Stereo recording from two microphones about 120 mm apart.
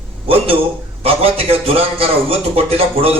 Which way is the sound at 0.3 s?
55° right (ahead or behind).